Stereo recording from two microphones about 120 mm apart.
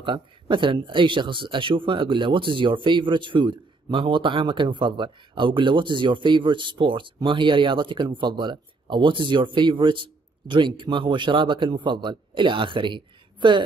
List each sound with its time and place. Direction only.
0.0 s speech: 40° right (ahead or behind)